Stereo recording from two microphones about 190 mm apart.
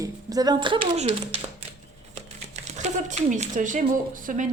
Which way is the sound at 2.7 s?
40° right (ahead or behind).